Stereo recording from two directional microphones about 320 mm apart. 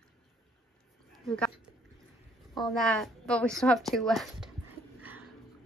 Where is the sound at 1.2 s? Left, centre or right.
Centre.